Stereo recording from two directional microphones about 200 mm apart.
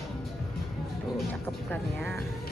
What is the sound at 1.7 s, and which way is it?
Speech, 5° left (ahead or behind).